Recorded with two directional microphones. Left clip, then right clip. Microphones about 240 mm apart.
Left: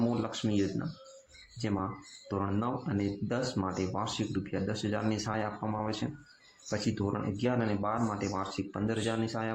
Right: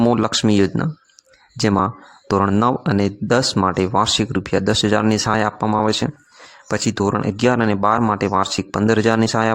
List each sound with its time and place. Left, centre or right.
0.2 s speech: right
1.6 s speech: right